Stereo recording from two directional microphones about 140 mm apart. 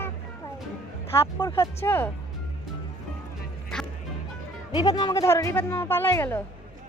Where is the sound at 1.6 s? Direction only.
15° left (ahead or behind).